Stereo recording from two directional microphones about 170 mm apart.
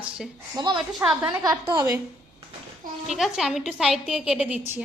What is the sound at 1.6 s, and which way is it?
Speech, 25° right (ahead or behind).